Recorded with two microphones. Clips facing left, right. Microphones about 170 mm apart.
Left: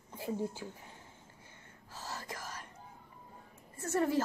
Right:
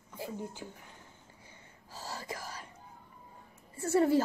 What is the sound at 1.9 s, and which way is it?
Whispering, 10° right (ahead or behind).